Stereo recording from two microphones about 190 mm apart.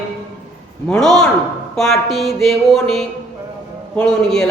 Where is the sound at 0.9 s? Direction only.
5° left (ahead or behind).